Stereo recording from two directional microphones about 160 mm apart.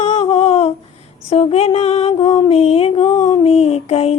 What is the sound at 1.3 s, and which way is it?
Music, 40° left (ahead or behind).